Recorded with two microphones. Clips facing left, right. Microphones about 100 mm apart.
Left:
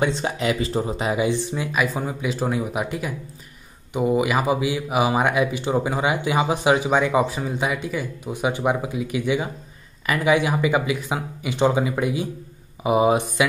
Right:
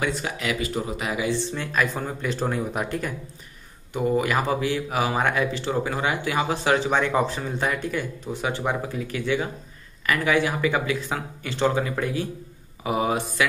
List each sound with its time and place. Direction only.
0.0 s speech: 25° left (ahead or behind); by 3.2 s 5° left (ahead or behind)
3.9 s speech: 15° left (ahead or behind)
8.3 s speech: 15° left (ahead or behind)